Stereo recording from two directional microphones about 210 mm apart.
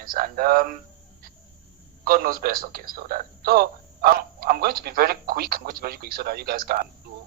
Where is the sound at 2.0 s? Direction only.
45° right (ahead or behind).